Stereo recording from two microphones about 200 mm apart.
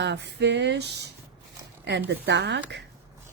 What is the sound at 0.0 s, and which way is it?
Speech, 60° right (ahead or behind).